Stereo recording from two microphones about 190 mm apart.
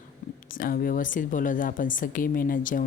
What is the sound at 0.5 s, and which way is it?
Speech, 50° left (ahead or behind).